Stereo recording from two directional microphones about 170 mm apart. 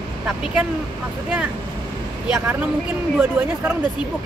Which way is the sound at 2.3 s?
10° right (ahead or behind).